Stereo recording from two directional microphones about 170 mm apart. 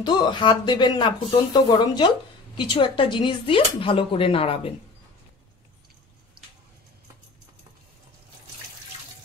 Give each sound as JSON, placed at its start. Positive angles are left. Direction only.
{"t": 0.0, "sound": "speech", "side_deg": 25}